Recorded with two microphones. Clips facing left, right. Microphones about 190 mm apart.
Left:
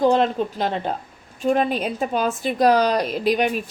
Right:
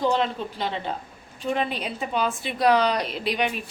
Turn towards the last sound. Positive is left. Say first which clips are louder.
# left 6 dB
turn(degrees=45)  # may be behind; listen again after turning